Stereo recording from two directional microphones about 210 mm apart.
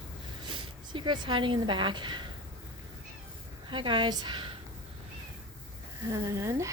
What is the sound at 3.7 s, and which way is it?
Speech, 25° right (ahead or behind).